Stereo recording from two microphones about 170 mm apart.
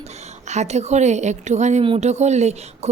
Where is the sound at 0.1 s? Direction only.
40° right (ahead or behind).